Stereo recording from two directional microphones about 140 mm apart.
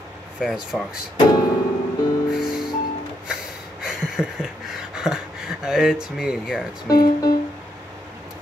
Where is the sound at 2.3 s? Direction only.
5° right (ahead or behind).